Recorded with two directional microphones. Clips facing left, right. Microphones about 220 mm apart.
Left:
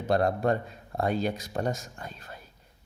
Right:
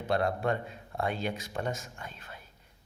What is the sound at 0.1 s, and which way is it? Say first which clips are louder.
A man's voice: left 4 dB; 40° left (ahead or behind).